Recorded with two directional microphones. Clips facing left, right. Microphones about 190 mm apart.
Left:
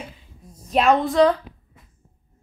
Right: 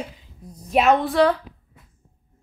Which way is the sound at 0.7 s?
5° right (ahead or behind).